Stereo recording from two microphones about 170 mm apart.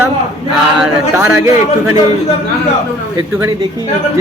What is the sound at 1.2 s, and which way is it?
Speech, 15° right (ahead or behind).